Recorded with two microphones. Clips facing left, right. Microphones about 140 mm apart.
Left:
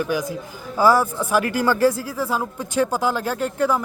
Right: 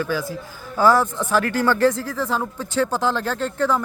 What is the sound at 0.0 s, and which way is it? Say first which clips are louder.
Speech: left 1 dB; 15° left (ahead or behind).